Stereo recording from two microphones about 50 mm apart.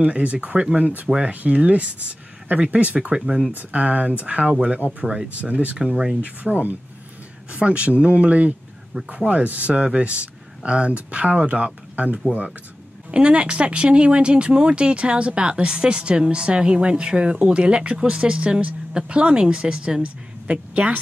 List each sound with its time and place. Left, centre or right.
0.0 s speech: right
3.5 s speech: right